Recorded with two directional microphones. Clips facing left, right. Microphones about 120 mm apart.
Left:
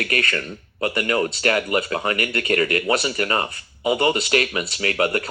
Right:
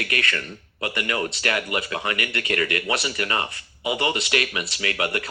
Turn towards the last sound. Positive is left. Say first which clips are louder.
# left 5 dB
turn(degrees=40)  # may be behind; listen again after turning